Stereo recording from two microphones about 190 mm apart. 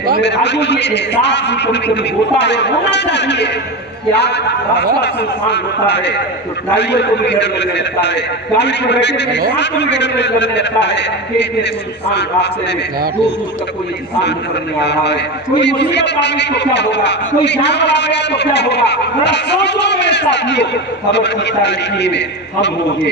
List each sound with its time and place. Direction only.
0.2 s a man's voice: 65° left (ahead or behind)
14.8 s a man's voice: 65° left (ahead or behind)